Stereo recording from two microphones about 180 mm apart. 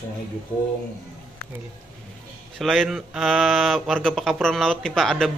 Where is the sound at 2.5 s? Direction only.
Centre (ahead or behind).